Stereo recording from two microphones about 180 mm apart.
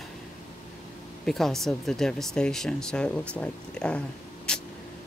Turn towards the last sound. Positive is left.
turn(degrees=5)  # may be behind; listen again after turning